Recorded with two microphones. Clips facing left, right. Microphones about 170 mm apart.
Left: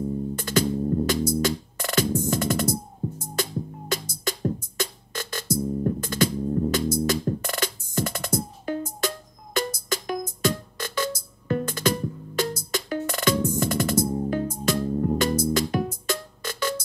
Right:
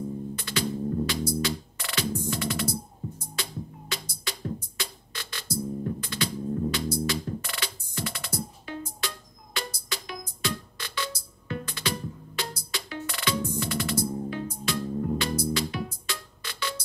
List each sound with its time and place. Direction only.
0.4 s music: 45° left (ahead or behind)